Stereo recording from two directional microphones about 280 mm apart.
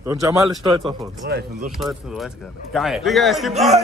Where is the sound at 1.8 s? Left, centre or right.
Centre.